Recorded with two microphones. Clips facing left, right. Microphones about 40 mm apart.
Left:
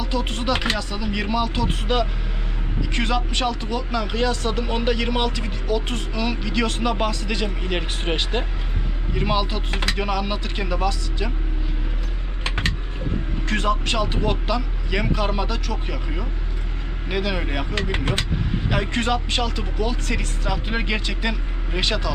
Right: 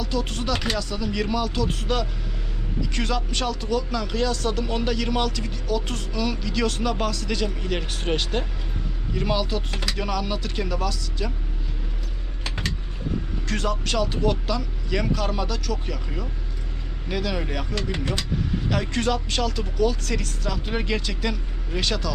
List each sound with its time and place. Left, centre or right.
0.0 s speech: left
12.5 s a sound: left
13.5 s speech: left
17.9 s speech: left
18.7 s speech: left